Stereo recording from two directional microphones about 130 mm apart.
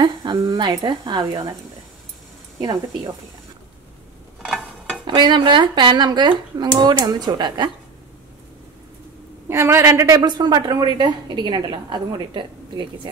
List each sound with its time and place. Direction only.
0.0 s a woman's voice: 35° right (ahead or behind)
2.6 s a woman's voice: 30° right (ahead or behind)
4.5 s a sound: centre (ahead or behind)
5.0 s a woman's voice: 35° right (ahead or behind)
9.5 s a woman's voice: 20° right (ahead or behind); by 13.1 s 35° right (ahead or behind)